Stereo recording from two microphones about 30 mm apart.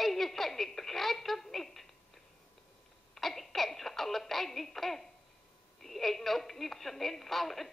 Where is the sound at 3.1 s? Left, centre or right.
Centre.